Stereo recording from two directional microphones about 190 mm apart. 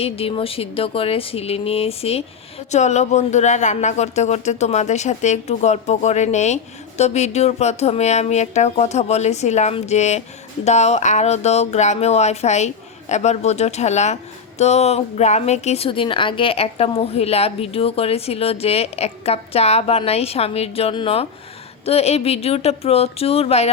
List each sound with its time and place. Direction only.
0.0 s speech: 30° left (ahead or behind)